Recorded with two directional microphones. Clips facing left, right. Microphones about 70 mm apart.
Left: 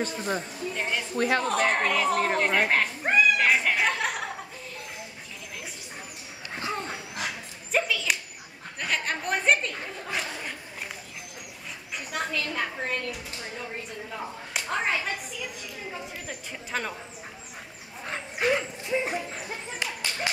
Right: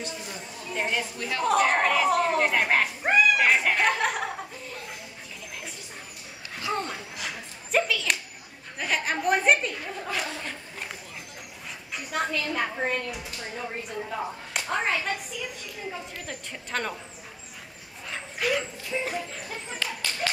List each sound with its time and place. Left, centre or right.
0.0 s a woman's voice: left
0.7 s speech: centre
1.1 s a woman's voice: left
1.4 s speech: centre
7.7 s a sound: centre
8.7 s a woman's voice: centre
12.1 s speech: centre
14.5 s speech: centre
18.0 s bow-wow: left
18.9 s a sound: centre